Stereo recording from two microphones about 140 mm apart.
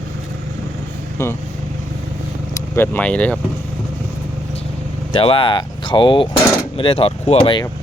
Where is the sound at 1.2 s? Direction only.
20° left (ahead or behind).